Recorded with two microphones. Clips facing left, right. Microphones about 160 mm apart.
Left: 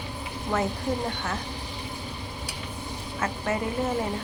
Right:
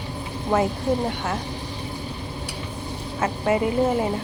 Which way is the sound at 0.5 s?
50° right (ahead or behind).